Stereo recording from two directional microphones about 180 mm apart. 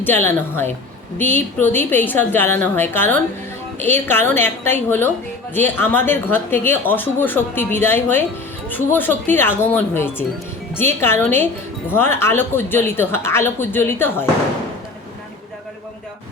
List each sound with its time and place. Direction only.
0.0 s speech: 10° left (ahead or behind)